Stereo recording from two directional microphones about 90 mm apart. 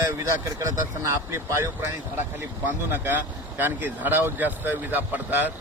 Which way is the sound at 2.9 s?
20° right (ahead or behind).